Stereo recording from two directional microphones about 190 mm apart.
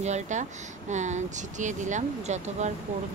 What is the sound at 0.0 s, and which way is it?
Speech, 40° right (ahead or behind).